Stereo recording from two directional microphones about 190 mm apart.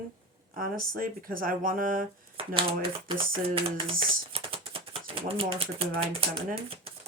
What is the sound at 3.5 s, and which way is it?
Music, 30° right (ahead or behind).